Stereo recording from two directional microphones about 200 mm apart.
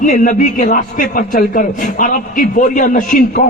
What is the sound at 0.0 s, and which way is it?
A man's voice, 40° left (ahead or behind).